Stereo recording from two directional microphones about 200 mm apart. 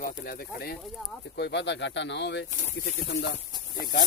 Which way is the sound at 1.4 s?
60° left (ahead or behind).